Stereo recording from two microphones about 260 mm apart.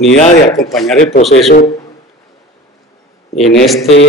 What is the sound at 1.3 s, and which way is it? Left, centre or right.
Speech, left.